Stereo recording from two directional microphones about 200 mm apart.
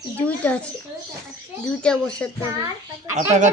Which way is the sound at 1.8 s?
5° left (ahead or behind).